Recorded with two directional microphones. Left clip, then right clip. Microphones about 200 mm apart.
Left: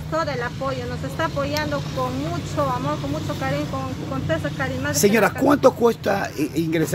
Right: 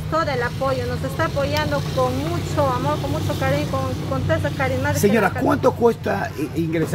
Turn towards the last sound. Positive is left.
turn(degrees=50)  # may be behind; listen again after turning